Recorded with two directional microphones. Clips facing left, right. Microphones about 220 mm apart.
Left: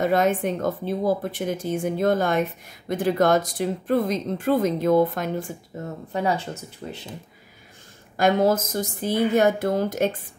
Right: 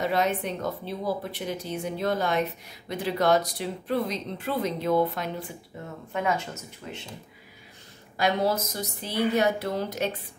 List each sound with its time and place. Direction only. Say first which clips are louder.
0.0 s speech: left 5 dB; 50° left (ahead or behind); by 7.0 s 30° left (ahead or behind)
8.2 s speech: left 6 dB; 50° left (ahead or behind)